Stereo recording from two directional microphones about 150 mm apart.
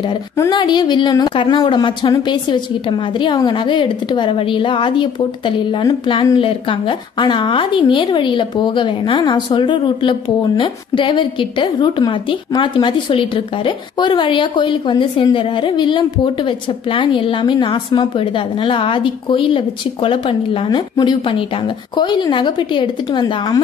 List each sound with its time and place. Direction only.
0.4 s a woman's voice: 30° left (ahead or behind)